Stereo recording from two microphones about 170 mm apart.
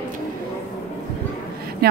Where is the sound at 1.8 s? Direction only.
65° right (ahead or behind).